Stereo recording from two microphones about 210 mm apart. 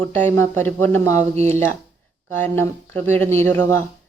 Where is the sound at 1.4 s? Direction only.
30° right (ahead or behind).